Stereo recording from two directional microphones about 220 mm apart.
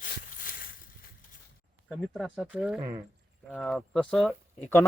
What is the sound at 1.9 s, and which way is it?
Speech, centre (ahead or behind).